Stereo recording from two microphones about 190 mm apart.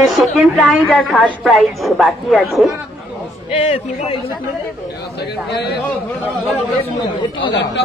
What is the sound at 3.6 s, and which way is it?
Speech, 30° left (ahead or behind).